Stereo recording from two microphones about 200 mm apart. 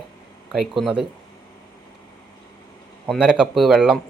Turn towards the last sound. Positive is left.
turn(degrees=0)  # may be behind; listen again after turning